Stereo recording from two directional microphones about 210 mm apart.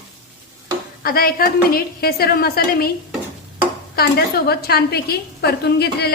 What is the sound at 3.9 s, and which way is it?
A woman's voice, 50° left (ahead or behind).